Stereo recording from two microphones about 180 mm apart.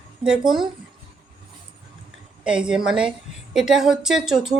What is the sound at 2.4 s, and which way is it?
Speech, 5° right (ahead or behind).